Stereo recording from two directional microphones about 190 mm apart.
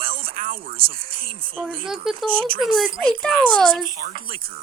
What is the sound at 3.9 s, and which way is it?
Speech, 45° right (ahead or behind).